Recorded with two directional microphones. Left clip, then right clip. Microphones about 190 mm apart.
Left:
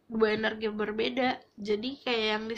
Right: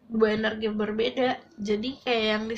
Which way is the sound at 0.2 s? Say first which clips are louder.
Right 3 dB; 45° left (ahead or behind).